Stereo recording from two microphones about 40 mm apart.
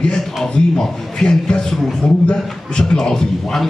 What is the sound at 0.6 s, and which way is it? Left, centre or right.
A man's voice, left.